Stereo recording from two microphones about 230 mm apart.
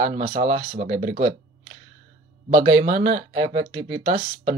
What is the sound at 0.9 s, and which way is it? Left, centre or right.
Speech, right.